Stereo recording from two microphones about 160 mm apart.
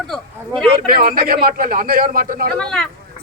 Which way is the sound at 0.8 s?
70° right (ahead or behind).